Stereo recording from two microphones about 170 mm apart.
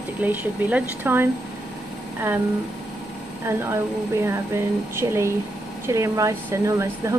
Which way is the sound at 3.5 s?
15° right (ahead or behind).